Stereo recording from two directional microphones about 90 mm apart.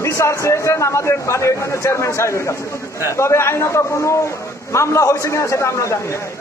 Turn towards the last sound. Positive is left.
turn(degrees=30)  # may be behind; listen again after turning